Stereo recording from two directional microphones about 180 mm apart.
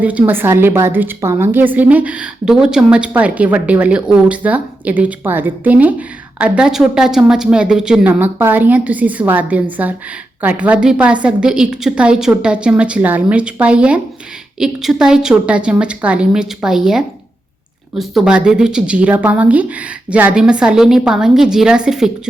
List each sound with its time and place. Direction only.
0.0 s a woman's voice: 10° right (ahead or behind)